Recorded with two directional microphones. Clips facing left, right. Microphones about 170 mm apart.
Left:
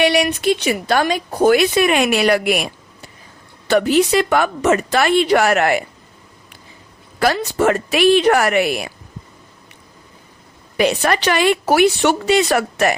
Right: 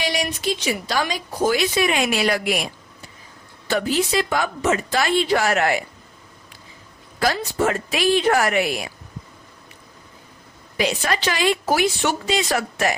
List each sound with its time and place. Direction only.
0.0 s a woman's voice: 65° left (ahead or behind)
3.7 s a woman's voice: 65° left (ahead or behind)
7.2 s a woman's voice: 65° left (ahead or behind)
10.8 s a woman's voice: 60° left (ahead or behind)